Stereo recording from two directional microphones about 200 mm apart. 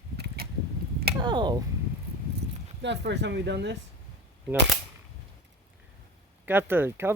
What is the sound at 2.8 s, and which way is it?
Speech, 60° right (ahead or behind).